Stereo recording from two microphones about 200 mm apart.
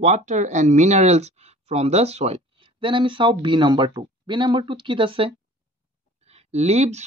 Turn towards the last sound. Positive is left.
turn(degrees=-35)  # may be behind; listen again after turning